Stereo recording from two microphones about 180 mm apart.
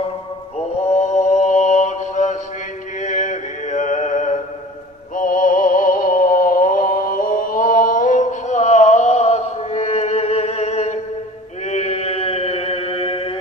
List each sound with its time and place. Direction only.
0.8 s mantra: 40° left (ahead or behind)
5.1 s music: 50° left (ahead or behind)
11.6 s chant: 40° left (ahead or behind)